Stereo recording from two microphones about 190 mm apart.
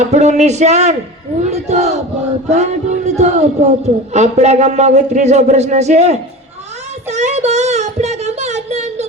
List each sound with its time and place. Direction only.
0.1 s a man's voice: 35° right (ahead or behind)
7.1 s child singing: 35° right (ahead or behind)